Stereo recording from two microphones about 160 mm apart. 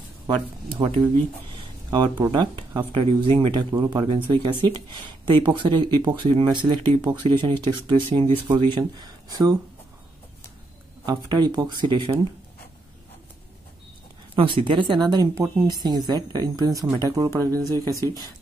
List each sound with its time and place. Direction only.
0.7 s speech: 30° right (ahead or behind)
11.1 s speech: 25° right (ahead or behind)
14.3 s speech: 35° right (ahead or behind)